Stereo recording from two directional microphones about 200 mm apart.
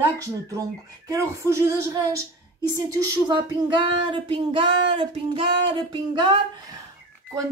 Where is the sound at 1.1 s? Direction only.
15° right (ahead or behind).